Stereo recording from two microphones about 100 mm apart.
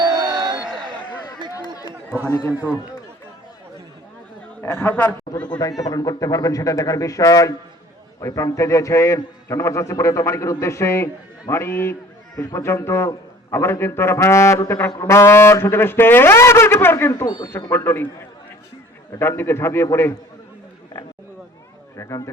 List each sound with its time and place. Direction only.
0.0 s a sound: 45° right (ahead or behind)
1.5 s chatter: 35° left (ahead or behind)
2.5 s a man's voice: 15° right (ahead or behind)
4.6 s a man's voice: 20° left (ahead or behind)
5.5 s a man's voice: 40° left (ahead or behind)
17.2 s speech: 40° left (ahead or behind)
17.7 s a man's voice: 25° left (ahead or behind)
21.9 s a sound: 30° left (ahead or behind)